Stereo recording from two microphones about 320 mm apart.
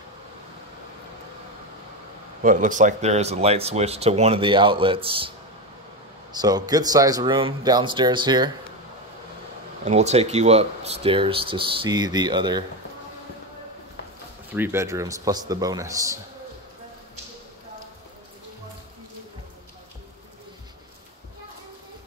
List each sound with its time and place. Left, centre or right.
2.4 s speech: right
6.3 s speech: centre
9.8 s speech: centre
14.5 s speech: centre